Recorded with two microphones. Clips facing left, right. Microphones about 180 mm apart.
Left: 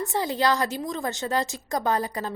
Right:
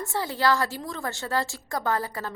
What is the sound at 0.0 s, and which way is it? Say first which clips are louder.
A woman's voice: left 2 dB; 20° left (ahead or behind).